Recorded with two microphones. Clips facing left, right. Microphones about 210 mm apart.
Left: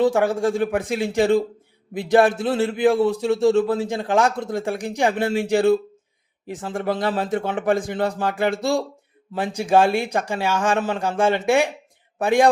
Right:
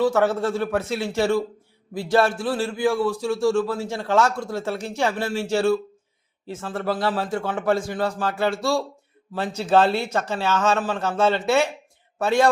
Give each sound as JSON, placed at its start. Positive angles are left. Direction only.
{"t": 0.0, "sound": "a man's voice", "side_deg": 15}